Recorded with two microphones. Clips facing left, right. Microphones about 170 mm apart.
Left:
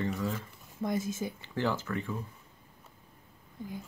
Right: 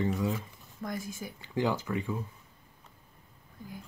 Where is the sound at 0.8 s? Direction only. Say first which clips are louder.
Left 5 dB; 20° left (ahead or behind).